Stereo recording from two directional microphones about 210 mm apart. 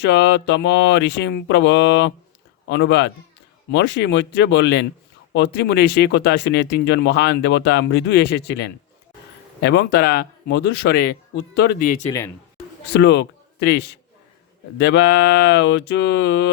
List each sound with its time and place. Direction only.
0.0 s speech: 55° left (ahead or behind)
12.9 s a man's voice: 55° left (ahead or behind)